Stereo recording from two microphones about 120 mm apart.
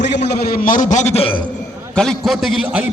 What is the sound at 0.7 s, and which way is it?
Speech, 90° left.